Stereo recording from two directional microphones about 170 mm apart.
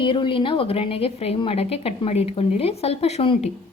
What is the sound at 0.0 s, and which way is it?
A woman's voice, 30° left (ahead or behind).